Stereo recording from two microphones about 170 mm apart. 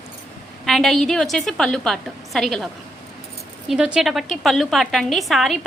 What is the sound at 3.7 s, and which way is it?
A woman's voice, 5° right (ahead or behind).